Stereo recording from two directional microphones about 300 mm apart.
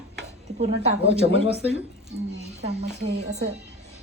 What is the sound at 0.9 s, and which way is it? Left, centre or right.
Speech, right.